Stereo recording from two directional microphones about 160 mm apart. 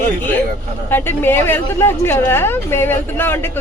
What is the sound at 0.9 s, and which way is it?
Speech, 15° left (ahead or behind).